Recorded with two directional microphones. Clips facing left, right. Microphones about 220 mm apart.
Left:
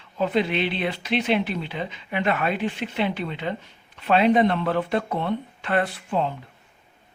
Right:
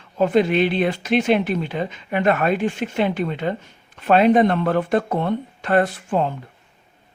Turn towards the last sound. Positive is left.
turn(degrees=-45)  # may be behind; listen again after turning